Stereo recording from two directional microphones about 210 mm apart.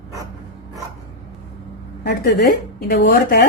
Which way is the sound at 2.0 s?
45° left (ahead or behind).